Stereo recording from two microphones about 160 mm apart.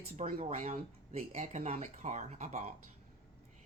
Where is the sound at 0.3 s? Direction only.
40° right (ahead or behind).